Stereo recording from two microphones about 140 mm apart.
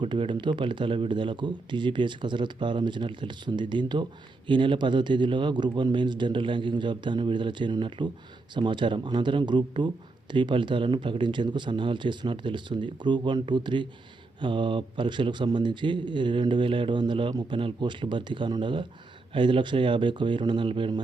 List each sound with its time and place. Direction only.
0.0 s speech: 35° right (ahead or behind)